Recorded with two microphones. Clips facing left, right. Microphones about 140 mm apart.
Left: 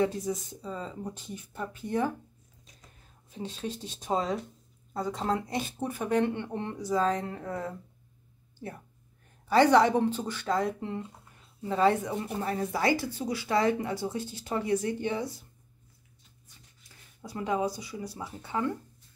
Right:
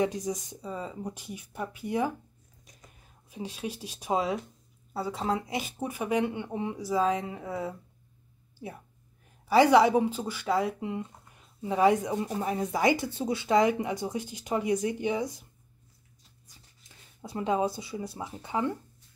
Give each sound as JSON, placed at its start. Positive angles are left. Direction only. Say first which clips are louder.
{"t": 0.0, "sound": "speech", "louder": "even", "side_deg": -15}
{"t": 3.3, "sound": "speech", "louder": "even", "side_deg": -10}
{"t": 9.5, "sound": "speech", "louder": "right 1 dB", "side_deg": -10}
{"t": 17.2, "sound": "speech", "louder": "right 2 dB", "side_deg": -25}